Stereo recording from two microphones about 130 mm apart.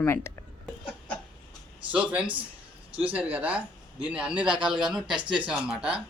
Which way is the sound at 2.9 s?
10° right (ahead or behind).